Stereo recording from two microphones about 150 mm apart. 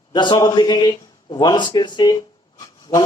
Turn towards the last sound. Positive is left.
turn(degrees=25)  # may be behind; listen again after turning